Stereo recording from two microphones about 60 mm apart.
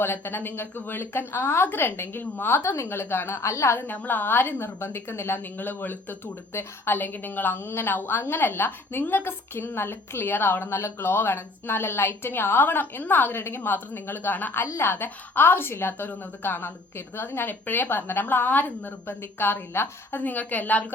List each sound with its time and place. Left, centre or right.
0.0 s a woman's voice: left
2.6 s a woman's voice: left
3.8 s a woman's voice: left
5.5 s a woman's voice: left
14.6 s a woman's voice: left